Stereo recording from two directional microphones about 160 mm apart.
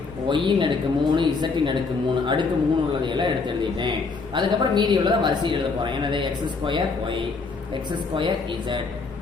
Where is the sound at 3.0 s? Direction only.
30° right (ahead or behind).